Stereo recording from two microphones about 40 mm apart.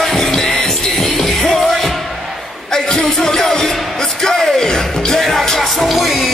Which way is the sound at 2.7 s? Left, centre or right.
Centre.